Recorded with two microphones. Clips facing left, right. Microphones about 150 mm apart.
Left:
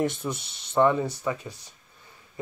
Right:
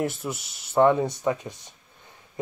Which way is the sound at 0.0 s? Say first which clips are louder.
Left 1 dB; 5° right (ahead or behind).